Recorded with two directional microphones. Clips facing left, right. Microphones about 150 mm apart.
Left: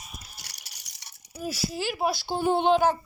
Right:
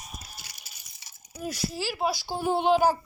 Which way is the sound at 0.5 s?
80° left.